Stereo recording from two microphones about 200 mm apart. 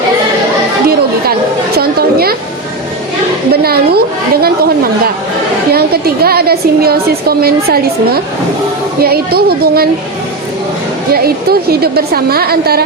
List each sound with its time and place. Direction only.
1.8 s a sound: 50° right (ahead or behind)
3.5 s a woman's voice: 50° right (ahead or behind)
5.7 s a woman's voice: 50° right (ahead or behind)
11.1 s a woman's voice: 50° right (ahead or behind)